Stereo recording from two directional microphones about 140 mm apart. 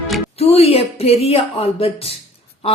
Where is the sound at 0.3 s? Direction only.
45° left (ahead or behind).